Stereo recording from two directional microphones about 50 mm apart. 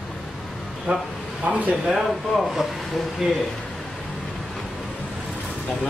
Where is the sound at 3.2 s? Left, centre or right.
Centre.